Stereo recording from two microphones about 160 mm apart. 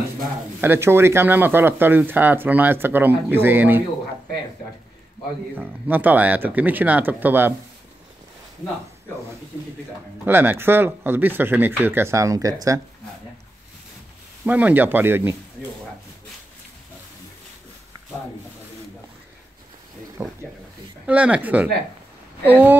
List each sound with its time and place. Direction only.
0.6 s speech: 15° right (ahead or behind)
5.6 s speech: 10° right (ahead or behind)
10.2 s speech: 15° right (ahead or behind)
14.4 s speech: 10° right (ahead or behind)
20.2 s a sound: 15° right (ahead or behind)
21.1 s speech: 10° right (ahead or behind)